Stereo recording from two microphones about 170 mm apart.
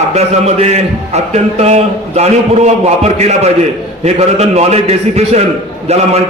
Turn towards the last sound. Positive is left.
turn(degrees=-40)  # may be behind; listen again after turning